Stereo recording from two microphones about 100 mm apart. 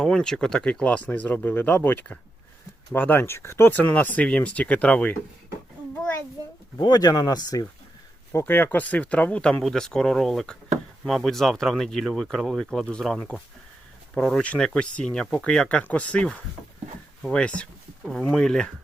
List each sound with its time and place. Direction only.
0.0 s speech: 5° left (ahead or behind)
6.7 s speech: 40° left (ahead or behind)
8.3 s speech: 25° left (ahead or behind); by 18.7 s 5° left (ahead or behind)